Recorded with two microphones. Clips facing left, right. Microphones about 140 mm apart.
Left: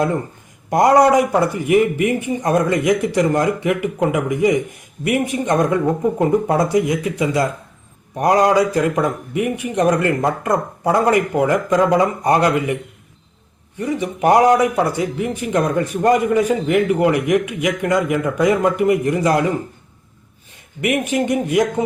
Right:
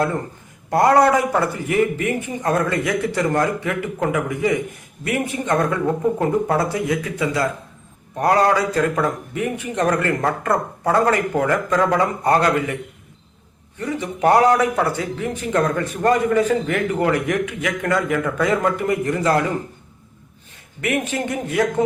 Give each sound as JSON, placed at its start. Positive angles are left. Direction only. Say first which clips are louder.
{"t": 0.7, "sound": "a man's voice", "louder": "left 2 dB", "side_deg": 15}
{"t": 13.7, "sound": "a man's voice", "louder": "left 3 dB", "side_deg": 15}
{"t": 20.8, "sound": "a man's voice", "louder": "left 4 dB", "side_deg": 15}